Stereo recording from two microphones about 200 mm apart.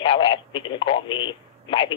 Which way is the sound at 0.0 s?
25° left (ahead or behind).